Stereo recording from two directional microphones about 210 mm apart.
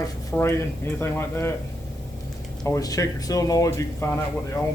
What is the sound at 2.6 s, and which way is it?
A man's voice, 15° left (ahead or behind).